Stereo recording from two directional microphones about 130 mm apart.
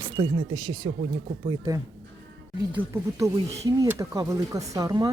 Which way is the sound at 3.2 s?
25° right (ahead or behind).